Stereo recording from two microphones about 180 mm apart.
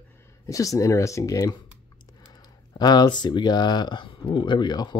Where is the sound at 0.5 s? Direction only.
20° left (ahead or behind).